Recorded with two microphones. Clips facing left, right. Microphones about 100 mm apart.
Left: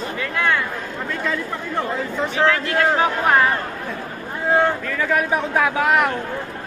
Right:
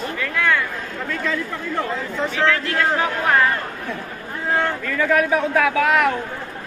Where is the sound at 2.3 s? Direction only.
20° left (ahead or behind).